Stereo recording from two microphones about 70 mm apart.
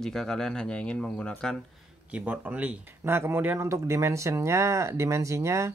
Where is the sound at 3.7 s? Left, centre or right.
Right.